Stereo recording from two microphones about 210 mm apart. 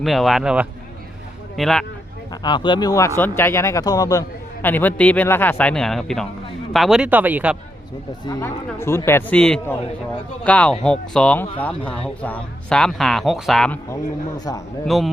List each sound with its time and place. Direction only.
0.0 s speech: centre (ahead or behind)
2.3 s a man's voice: 20° left (ahead or behind); by 7.5 s 10° right (ahead or behind)
8.2 s a man's voice: 15° left (ahead or behind)
13.9 s a man's voice: 15° left (ahead or behind)
14.8 s speech: centre (ahead or behind)